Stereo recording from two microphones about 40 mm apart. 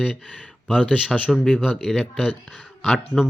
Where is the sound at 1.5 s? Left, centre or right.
Centre.